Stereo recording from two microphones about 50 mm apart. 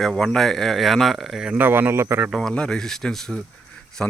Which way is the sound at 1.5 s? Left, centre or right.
Right.